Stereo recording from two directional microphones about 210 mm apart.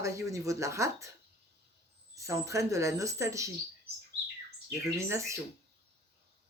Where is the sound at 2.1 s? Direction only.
15° right (ahead or behind).